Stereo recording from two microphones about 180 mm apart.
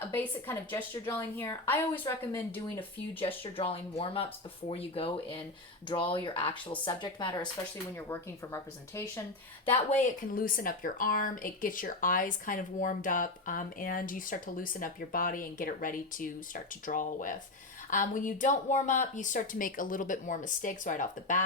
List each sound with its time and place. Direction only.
0.0 s a woman's voice: 10° left (ahead or behind)
2.7 s speech: 30° left (ahead or behind)
9.9 s speech: 45° left (ahead or behind)